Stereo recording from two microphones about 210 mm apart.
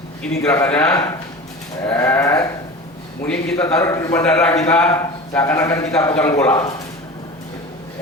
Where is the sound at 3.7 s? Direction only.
15° left (ahead or behind).